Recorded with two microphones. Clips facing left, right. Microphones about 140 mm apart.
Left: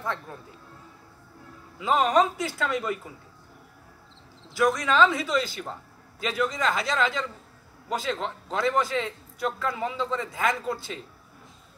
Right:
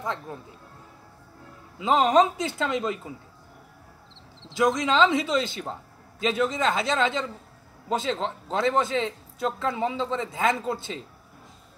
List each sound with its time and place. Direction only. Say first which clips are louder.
0.0 s speech: right 1 dB; 20° right (ahead or behind)
1.8 s a man's voice: right 2 dB; 25° right (ahead or behind)
4.6 s a man's voice: right 1 dB; 20° right (ahead or behind)